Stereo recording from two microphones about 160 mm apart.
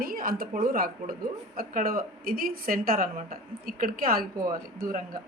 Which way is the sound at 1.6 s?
60° right (ahead or behind).